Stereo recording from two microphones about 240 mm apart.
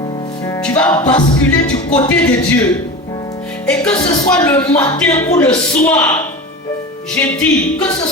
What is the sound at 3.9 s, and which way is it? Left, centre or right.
Music, left.